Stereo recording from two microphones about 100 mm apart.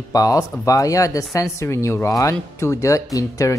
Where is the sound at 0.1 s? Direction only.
35° left (ahead or behind).